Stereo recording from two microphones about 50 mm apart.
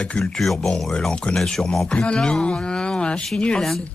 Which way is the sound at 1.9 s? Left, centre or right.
Left.